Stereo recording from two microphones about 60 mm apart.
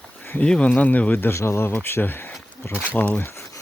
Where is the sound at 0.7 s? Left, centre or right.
Left.